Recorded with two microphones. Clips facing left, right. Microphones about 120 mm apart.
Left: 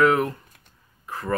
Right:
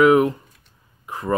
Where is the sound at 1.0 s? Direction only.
20° right (ahead or behind).